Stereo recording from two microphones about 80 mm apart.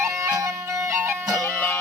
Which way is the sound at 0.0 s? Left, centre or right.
Right.